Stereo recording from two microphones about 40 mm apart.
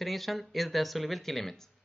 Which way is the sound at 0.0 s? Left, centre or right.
Centre.